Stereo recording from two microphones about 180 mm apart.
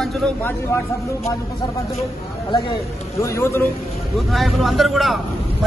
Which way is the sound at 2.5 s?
20° left (ahead or behind).